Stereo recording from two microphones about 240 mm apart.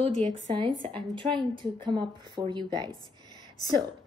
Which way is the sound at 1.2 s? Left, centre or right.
Centre.